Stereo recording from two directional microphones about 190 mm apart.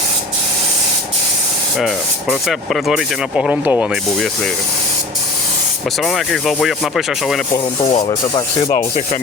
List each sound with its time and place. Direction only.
1.8 s speech: centre (ahead or behind)
6.0 s speech: centre (ahead or behind)
7.9 s speech: 25° left (ahead or behind)